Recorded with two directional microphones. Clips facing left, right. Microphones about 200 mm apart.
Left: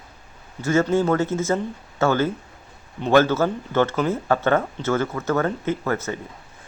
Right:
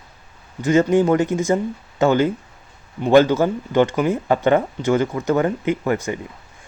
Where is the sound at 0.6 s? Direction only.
15° right (ahead or behind).